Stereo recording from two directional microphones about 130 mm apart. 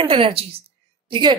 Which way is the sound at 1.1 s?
35° right (ahead or behind).